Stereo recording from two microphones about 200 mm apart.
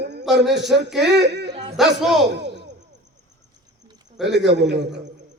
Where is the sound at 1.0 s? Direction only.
55° right (ahead or behind).